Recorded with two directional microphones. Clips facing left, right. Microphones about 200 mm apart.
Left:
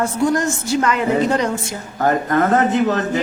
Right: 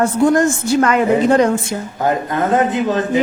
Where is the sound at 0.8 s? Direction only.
50° right (ahead or behind).